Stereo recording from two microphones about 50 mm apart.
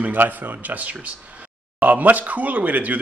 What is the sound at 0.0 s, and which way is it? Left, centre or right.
Speech, right.